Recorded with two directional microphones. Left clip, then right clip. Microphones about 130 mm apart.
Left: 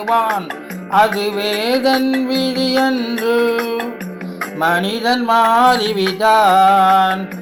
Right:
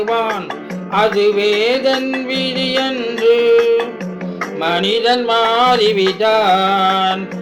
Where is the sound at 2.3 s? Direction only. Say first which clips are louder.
Even; 80° left.